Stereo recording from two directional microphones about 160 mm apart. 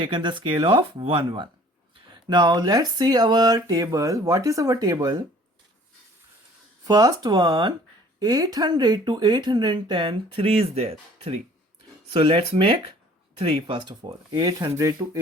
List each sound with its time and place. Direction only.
0.0 s speech: 30° right (ahead or behind)
6.8 s speech: 25° right (ahead or behind)